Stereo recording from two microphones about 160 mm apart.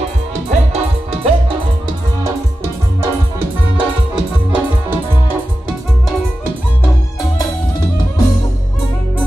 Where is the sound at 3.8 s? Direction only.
10° right (ahead or behind).